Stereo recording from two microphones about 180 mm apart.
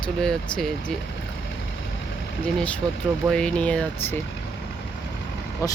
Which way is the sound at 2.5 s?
5° left (ahead or behind).